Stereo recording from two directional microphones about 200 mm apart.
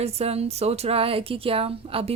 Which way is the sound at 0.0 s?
30° right (ahead or behind).